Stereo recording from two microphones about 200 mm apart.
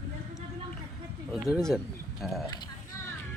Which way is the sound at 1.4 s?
Centre (ahead or behind).